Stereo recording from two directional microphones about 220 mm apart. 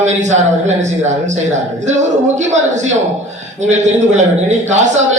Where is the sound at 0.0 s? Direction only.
30° right (ahead or behind).